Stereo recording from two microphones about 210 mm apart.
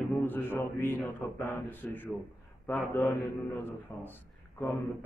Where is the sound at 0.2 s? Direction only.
10° left (ahead or behind).